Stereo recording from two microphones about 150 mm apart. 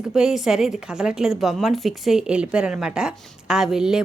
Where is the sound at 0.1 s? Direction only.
5° right (ahead or behind).